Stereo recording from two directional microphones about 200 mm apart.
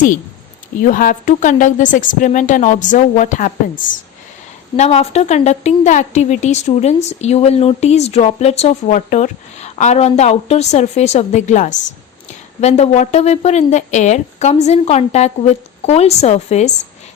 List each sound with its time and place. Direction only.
0.9 s a woman's voice: 40° left (ahead or behind)
4.8 s a woman's voice: 35° left (ahead or behind)